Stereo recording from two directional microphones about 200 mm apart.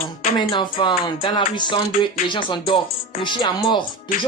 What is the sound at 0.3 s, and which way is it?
Music, 25° left (ahead or behind).